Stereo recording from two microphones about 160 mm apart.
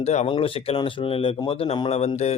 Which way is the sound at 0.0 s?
45° left (ahead or behind).